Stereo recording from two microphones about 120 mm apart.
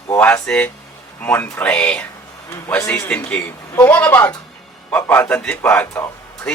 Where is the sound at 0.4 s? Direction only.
10° left (ahead or behind).